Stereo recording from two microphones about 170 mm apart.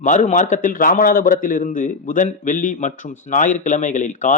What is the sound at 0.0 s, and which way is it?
A man's voice, 50° left (ahead or behind).